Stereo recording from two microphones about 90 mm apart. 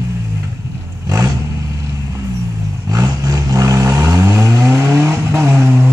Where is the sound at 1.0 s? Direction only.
40° right (ahead or behind).